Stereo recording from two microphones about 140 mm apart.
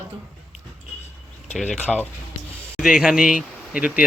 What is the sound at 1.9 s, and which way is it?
Speech, 5° left (ahead or behind).